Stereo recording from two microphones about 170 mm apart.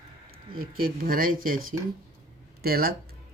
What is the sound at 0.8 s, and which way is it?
Speech, 55° right (ahead or behind).